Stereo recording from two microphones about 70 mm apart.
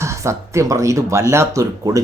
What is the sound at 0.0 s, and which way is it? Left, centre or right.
Speech, right.